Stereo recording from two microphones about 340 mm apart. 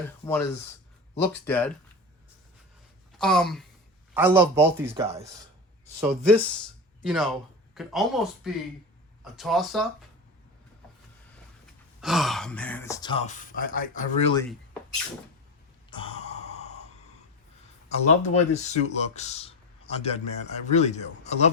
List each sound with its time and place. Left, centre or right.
1.2 s speech: centre
3.2 s speech: centre
5.0 s speech: centre
6.0 s speech: centre
11.9 s speech: centre
15.9 s gasp: centre
17.9 s speech: centre